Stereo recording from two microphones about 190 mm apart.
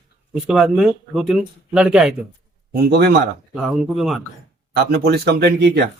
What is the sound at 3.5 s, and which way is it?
Speech, 5° right (ahead or behind).